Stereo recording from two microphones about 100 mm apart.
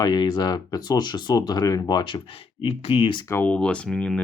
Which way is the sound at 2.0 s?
55° left (ahead or behind).